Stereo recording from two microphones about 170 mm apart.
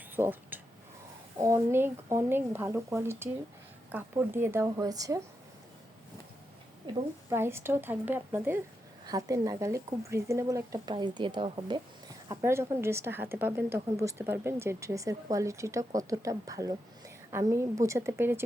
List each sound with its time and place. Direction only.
0.2 s a woman's voice: 10° right (ahead or behind)
7.3 s a woman's voice: 15° right (ahead or behind)
9.0 s speech: 20° right (ahead or behind)
12.3 s a woman's voice: 15° right (ahead or behind)